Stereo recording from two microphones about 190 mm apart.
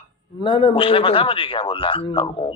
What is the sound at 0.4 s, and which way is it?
A man's voice, 25° left (ahead or behind).